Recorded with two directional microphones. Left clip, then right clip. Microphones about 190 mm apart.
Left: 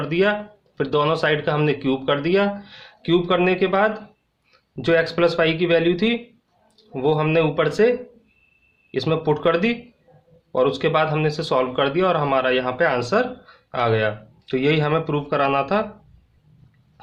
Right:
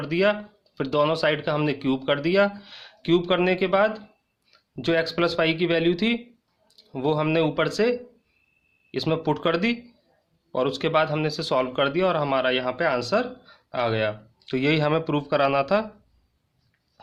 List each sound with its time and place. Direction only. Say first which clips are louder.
0.0 s speech: left 2 dB; 20° right (ahead or behind)